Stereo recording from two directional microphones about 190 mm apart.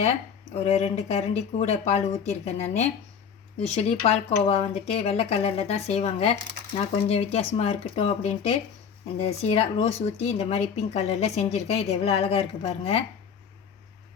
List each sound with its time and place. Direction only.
0.5 s speech: 35° left (ahead or behind)